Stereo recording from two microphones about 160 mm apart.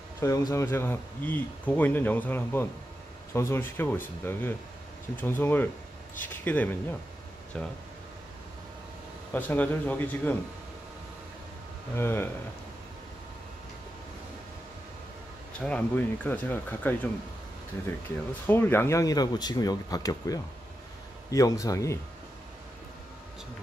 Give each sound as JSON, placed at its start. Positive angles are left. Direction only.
{"t": 0.2, "sound": "speech", "side_deg": 20}
{"t": 9.3, "sound": "speech", "side_deg": 10}
{"t": 11.9, "sound": "speech", "side_deg": 15}
{"t": 15.6, "sound": "speech", "side_deg": 10}
{"t": 18.5, "sound": "speech", "side_deg": 15}